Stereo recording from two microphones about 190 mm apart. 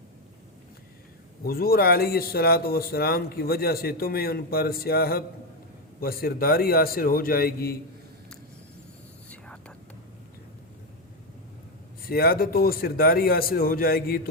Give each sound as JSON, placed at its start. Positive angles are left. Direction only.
{"t": 1.5, "sound": "speech", "side_deg": 50}
{"t": 9.3, "sound": "whispering", "side_deg": 5}
{"t": 12.0, "sound": "speech", "side_deg": 50}